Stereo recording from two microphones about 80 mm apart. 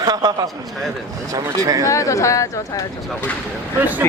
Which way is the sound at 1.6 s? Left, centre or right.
Right.